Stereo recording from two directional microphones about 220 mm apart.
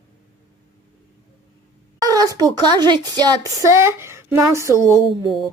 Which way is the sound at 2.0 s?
15° right (ahead or behind).